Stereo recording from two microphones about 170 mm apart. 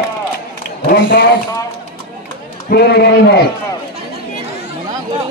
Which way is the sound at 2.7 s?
70° left (ahead or behind).